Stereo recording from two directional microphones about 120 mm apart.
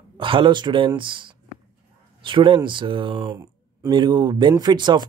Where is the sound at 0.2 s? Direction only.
45° right (ahead or behind).